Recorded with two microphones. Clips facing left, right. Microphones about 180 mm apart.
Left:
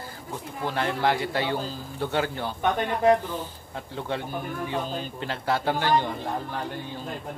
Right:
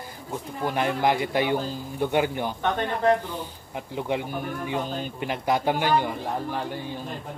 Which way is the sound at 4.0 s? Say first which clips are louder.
Right 3 dB; 15° right (ahead or behind).